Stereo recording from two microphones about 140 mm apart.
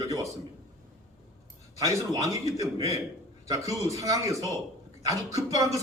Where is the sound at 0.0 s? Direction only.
25° right (ahead or behind).